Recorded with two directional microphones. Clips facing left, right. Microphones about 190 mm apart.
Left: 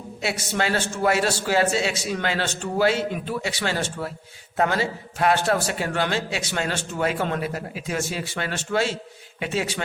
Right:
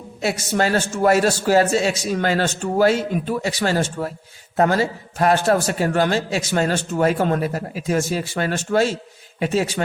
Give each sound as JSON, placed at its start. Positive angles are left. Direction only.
{"t": 0.2, "sound": "a man's voice", "side_deg": -40}